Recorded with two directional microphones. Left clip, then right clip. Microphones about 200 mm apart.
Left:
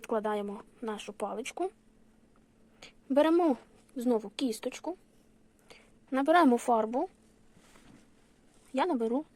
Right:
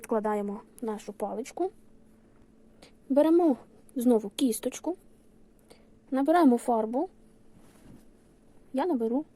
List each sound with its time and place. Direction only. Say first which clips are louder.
0.0 s speech: right 3 dB; centre (ahead or behind)
2.8 s a woman's voice: right 2 dB; centre (ahead or behind)
3.9 s a woman's voice: right 5 dB; 20° right (ahead or behind)
5.6 s speech: right 3 dB; centre (ahead or behind)
8.7 s speech: right 1 dB; centre (ahead or behind)